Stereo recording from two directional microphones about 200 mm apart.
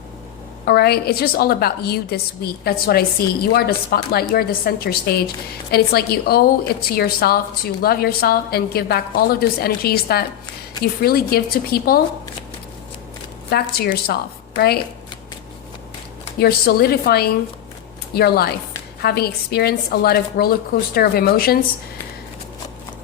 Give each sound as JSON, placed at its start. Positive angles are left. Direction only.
{"t": 0.6, "sound": "a woman's voice", "side_deg": 50}
{"t": 13.5, "sound": "a woman's voice", "side_deg": 50}
{"t": 16.4, "sound": "a woman's voice", "side_deg": 50}